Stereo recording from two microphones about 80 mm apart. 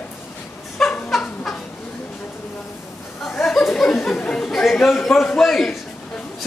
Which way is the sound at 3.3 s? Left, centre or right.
Centre.